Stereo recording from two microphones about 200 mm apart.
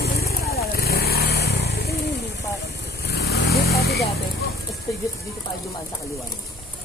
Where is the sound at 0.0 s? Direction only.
50° left (ahead or behind).